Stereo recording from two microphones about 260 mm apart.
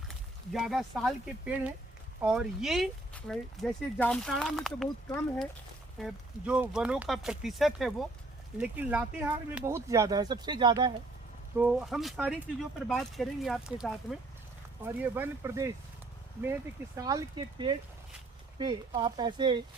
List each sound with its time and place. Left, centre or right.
0.5 s speech: centre
11.5 s speech: centre